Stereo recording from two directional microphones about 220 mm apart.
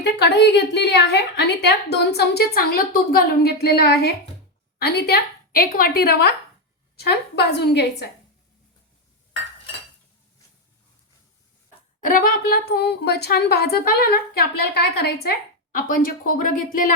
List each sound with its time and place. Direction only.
0.0 s speech: 50° left (ahead or behind)
11.9 s speech: 40° left (ahead or behind)